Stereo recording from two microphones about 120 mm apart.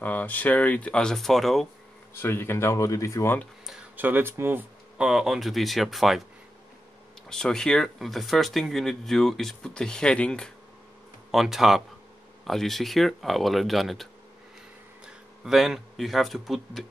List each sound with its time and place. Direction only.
0.0 s speech: 15° left (ahead or behind)
2.2 s speech: 20° left (ahead or behind)
3.9 s speech: 15° right (ahead or behind); by 6.2 s centre (ahead or behind)
7.2 s speech: 5° left (ahead or behind)
11.3 s speech: 5° right (ahead or behind)
15.0 s speech: centre (ahead or behind)